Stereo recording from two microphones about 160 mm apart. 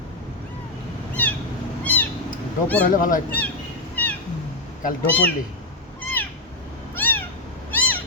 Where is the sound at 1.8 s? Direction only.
10° left (ahead or behind).